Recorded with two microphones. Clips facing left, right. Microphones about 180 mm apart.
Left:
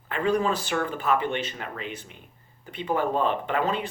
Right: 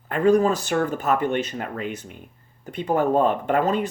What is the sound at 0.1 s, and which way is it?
Speech, 45° right (ahead or behind).